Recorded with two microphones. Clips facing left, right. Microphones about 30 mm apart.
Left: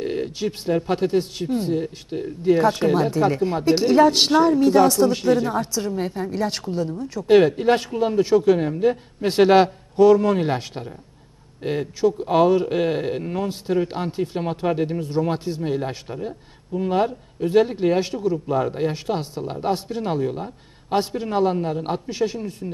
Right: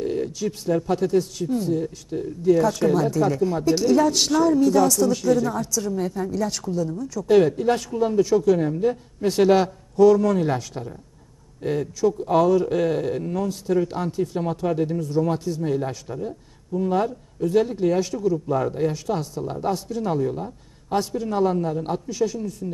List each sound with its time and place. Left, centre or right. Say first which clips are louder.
0.0 s speech: even; left